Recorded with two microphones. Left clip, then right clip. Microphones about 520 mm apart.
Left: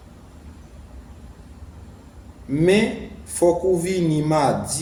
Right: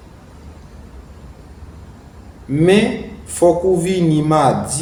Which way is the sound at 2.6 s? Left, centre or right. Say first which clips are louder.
Right 5 dB; left.